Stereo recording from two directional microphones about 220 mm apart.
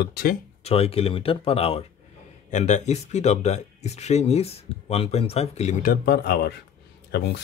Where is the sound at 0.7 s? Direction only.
25° left (ahead or behind).